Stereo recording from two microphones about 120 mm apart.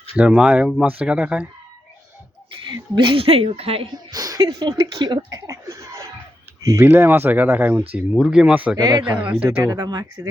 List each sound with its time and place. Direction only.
0.2 s speech: 5° right (ahead or behind)
2.5 s speech: 45° right (ahead or behind)
3.9 s speech: 30° right (ahead or behind); by 8.7 s 10° right (ahead or behind)
8.7 s speech: 30° right (ahead or behind)
9.1 s speech: 10° right (ahead or behind)
9.6 s speech: 30° right (ahead or behind)